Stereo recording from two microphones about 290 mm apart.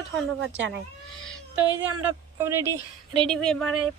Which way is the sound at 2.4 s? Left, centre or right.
Centre.